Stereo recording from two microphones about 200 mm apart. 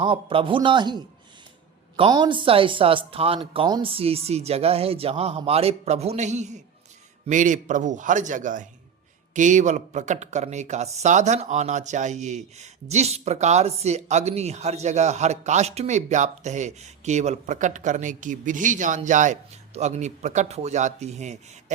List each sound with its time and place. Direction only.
0.0 s speech: 25° right (ahead or behind)